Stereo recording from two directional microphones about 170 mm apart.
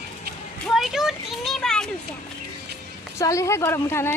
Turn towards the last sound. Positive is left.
turn(degrees=15)  # may be behind; listen again after turning